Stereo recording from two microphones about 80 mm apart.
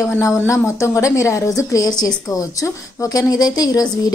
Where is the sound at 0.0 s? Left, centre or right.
Left.